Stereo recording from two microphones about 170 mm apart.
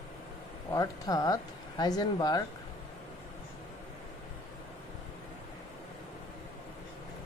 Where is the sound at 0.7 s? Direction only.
20° left (ahead or behind).